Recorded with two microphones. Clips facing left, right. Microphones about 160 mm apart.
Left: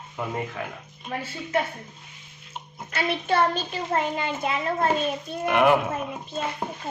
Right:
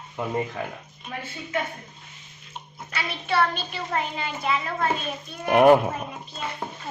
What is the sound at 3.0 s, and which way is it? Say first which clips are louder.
A child's voice: left 2 dB; 50° left (ahead or behind).